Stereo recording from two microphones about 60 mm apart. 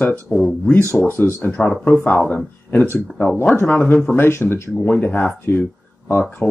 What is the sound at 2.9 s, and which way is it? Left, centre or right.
Speech, left.